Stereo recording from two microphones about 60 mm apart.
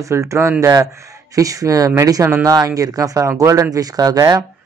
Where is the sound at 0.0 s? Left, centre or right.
Right.